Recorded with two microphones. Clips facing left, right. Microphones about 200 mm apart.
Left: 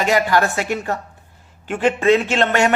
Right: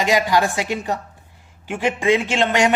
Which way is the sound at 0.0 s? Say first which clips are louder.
Left 1 dB; 15° right (ahead or behind).